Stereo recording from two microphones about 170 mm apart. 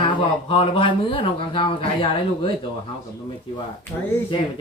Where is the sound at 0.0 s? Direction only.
30° left (ahead or behind).